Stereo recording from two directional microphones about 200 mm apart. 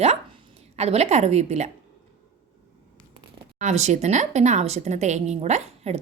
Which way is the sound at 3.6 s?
35° right (ahead or behind).